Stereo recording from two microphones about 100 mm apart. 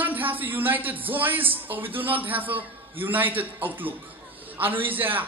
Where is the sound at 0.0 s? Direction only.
20° right (ahead or behind).